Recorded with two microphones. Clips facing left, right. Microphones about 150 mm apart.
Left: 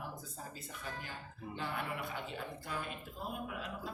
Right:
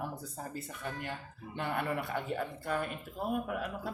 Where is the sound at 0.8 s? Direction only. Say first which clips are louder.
Right 5 dB; 65° right (ahead or behind).